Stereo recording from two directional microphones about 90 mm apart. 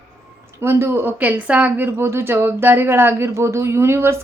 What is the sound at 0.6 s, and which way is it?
A woman's voice, 25° right (ahead or behind).